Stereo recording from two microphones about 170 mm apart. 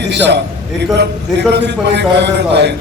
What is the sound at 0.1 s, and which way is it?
A man's voice, 90° right.